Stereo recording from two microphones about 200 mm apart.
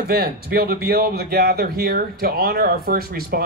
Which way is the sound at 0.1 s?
50° right (ahead or behind).